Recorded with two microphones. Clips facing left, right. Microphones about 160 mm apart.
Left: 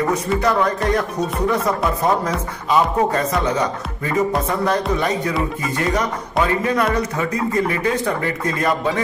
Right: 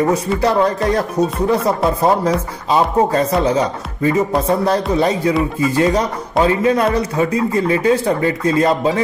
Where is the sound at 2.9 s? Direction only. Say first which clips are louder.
Right 4 dB; 30° right (ahead or behind).